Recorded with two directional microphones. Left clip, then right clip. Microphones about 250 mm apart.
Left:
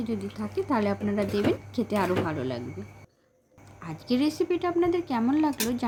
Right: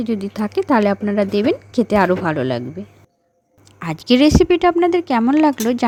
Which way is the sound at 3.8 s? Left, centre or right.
Right.